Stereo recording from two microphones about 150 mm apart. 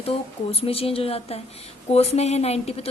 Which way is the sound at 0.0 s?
40° left (ahead or behind).